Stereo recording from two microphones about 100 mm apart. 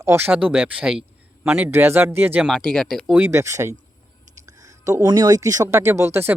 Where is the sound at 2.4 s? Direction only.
5° left (ahead or behind).